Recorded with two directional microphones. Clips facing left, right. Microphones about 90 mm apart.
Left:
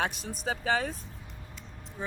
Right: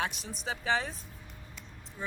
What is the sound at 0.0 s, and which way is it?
Speech, 50° left (ahead or behind).